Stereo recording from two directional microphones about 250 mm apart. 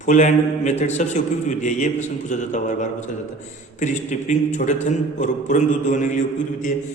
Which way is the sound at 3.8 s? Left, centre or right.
Left.